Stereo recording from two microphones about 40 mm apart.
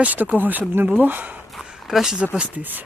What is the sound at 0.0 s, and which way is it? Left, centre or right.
Speech, right.